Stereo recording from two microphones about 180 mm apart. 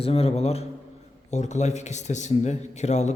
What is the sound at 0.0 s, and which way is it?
A man's voice, 35° left (ahead or behind).